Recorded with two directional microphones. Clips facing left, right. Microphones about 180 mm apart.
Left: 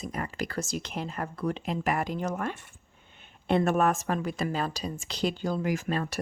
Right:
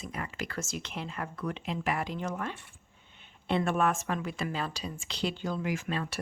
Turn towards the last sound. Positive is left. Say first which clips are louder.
# left 4 dB
turn(degrees=40)  # may be behind; listen again after turning